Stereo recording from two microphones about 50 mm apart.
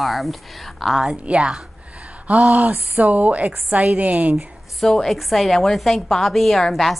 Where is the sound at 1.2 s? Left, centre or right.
Right.